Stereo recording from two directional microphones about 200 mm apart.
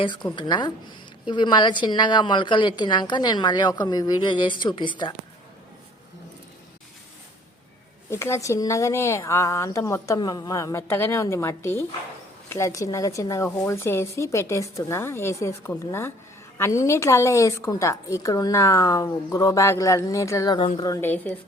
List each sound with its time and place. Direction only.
0.0 s a woman's voice: 25° left (ahead or behind)
8.1 s a woman's voice: 15° left (ahead or behind)